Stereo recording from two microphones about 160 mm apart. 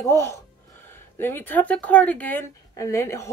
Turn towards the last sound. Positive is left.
turn(degrees=15)  # may be behind; listen again after turning